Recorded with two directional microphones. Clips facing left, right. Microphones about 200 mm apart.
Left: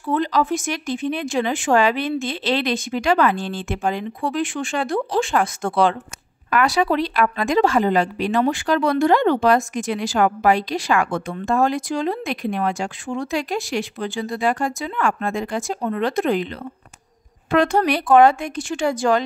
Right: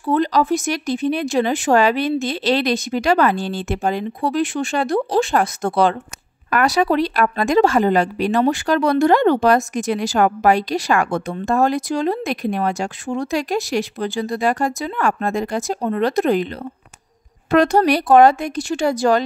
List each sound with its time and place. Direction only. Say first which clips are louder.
0.0 s a woman's voice: right 3 dB; 40° right (ahead or behind)
17.5 s speech: right 3 dB; 40° right (ahead or behind)